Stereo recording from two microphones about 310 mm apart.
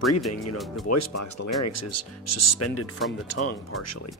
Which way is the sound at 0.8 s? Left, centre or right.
Left.